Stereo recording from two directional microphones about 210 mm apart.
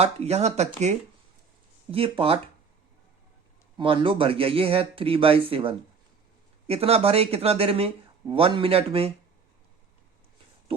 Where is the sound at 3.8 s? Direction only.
25° right (ahead or behind).